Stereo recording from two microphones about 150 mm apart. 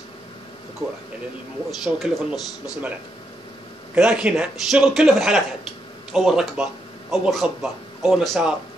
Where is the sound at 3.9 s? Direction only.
5° right (ahead or behind).